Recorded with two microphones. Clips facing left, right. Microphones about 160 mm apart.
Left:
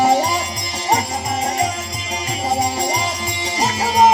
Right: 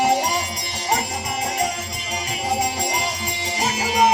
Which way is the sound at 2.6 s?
35° left (ahead or behind).